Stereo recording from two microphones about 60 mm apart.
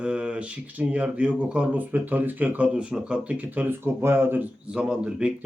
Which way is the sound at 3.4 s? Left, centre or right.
Right.